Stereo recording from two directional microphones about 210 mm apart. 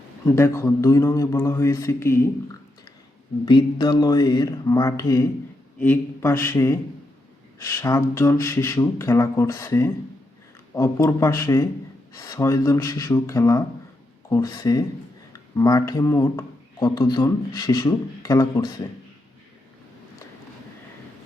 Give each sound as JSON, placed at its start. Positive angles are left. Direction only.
{"t": 0.3, "sound": "speech", "side_deg": 10}
{"t": 3.4, "sound": "speech", "side_deg": 20}
{"t": 7.8, "sound": "speech", "side_deg": 15}